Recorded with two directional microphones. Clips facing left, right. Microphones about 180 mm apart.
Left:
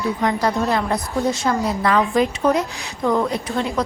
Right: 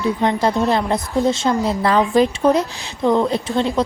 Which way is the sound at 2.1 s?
35° right (ahead or behind).